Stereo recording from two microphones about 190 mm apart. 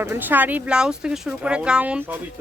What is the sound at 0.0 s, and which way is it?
Speech, 10° right (ahead or behind).